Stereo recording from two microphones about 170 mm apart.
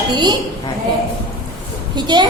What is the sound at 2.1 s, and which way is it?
Speech, 25° right (ahead or behind).